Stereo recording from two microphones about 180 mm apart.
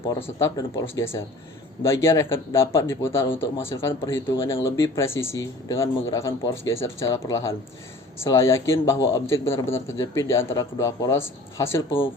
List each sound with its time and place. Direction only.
0.1 s speech: 15° left (ahead or behind)